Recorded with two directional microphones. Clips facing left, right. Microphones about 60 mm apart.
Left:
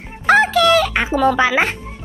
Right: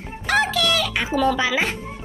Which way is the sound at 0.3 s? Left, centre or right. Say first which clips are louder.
Left 8 dB; left.